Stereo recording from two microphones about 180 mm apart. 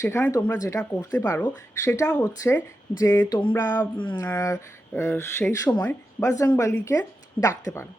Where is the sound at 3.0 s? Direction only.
15° left (ahead or behind).